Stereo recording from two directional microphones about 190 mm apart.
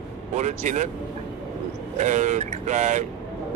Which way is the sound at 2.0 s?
40° right (ahead or behind).